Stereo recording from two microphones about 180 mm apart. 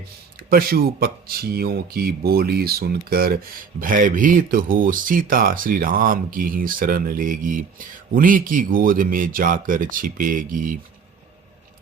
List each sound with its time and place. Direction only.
0.3 s speech: 55° right (ahead or behind)